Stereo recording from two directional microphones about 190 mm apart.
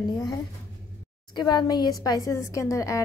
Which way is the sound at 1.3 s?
20° left (ahead or behind).